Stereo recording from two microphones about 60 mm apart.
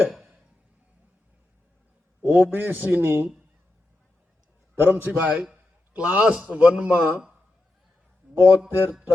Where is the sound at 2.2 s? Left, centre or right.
Right.